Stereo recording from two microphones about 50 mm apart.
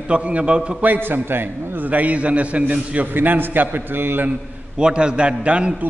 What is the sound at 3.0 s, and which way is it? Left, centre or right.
A man's voice, right.